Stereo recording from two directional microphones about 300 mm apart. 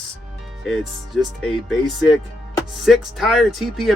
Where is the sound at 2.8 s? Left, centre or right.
Centre.